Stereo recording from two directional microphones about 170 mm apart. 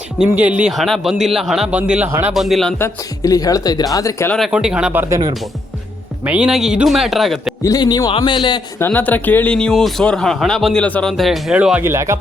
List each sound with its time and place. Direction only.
0.3 s speech: 10° right (ahead or behind)
2.3 s speech: centre (ahead or behind)
2.7 s speech: 15° left (ahead or behind)
4.4 s speech: centre (ahead or behind)
6.2 s speech: 5° right (ahead or behind)
7.6 s speech: 25° left (ahead or behind)
8.8 s speech: 10° left (ahead or behind); by 12.1 s 15° right (ahead or behind)